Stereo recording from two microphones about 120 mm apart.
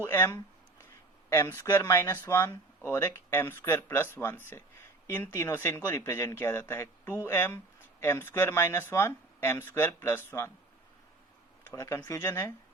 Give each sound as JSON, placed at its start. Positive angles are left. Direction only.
{"t": 0.0, "sound": "speech", "side_deg": 20}
{"t": 11.7, "sound": "speech", "side_deg": 25}